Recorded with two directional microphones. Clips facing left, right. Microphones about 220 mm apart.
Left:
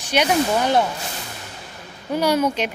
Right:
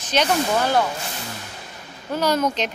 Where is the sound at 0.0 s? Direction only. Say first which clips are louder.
Left 2 dB; 10° left (ahead or behind).